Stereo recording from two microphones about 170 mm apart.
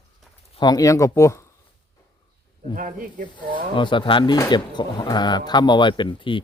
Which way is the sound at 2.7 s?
55° right (ahead or behind).